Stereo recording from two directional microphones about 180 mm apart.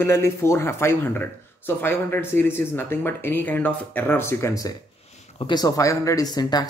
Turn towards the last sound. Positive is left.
turn(degrees=25)  # may be behind; listen again after turning